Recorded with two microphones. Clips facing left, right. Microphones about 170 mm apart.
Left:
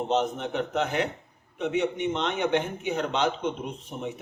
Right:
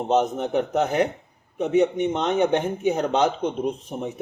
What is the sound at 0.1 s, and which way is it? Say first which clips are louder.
A man's voice: right 8 dB; 45° right (ahead or behind).